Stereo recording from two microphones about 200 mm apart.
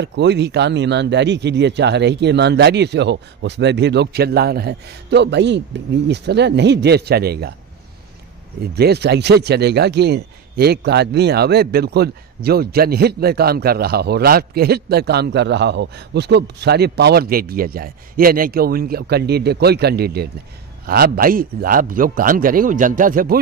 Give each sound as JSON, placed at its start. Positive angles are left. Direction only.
{"t": 0.0, "sound": "speech", "side_deg": -60}
{"t": 8.7, "sound": "speech", "side_deg": -55}